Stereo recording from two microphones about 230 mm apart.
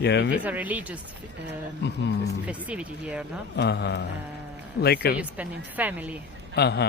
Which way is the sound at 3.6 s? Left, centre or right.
Left.